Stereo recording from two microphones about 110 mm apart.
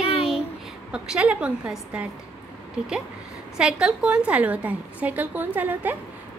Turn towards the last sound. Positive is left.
turn(degrees=-15)  # may be behind; listen again after turning